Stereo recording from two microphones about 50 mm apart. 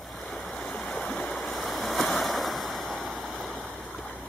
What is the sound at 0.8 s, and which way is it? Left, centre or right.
Stream, centre.